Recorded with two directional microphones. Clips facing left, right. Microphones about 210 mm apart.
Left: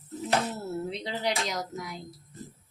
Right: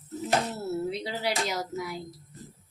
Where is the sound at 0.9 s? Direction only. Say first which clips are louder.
Even; 5° right (ahead or behind).